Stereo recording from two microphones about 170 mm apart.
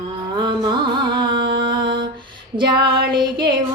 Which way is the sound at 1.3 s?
75° right (ahead or behind).